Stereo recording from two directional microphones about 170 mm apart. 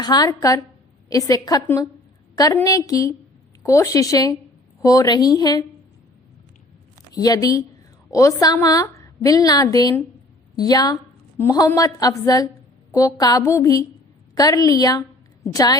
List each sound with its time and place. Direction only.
0.0 s a woman's voice: 20° left (ahead or behind)
7.1 s a woman's voice: 20° left (ahead or behind)